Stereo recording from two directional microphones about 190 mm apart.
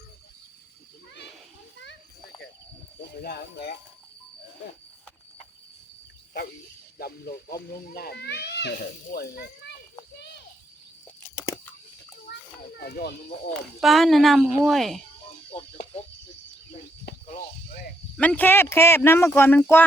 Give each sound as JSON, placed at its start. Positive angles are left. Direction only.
{"t": 3.2, "sound": "speech", "side_deg": 55}
{"t": 7.0, "sound": "speech", "side_deg": 55}
{"t": 11.3, "sound": "a sound", "side_deg": 15}
{"t": 12.3, "sound": "children playing", "side_deg": 55}
{"t": 13.8, "sound": "speech", "side_deg": 0}
{"t": 17.2, "sound": "snake", "side_deg": 45}
{"t": 18.2, "sound": "speech", "side_deg": 10}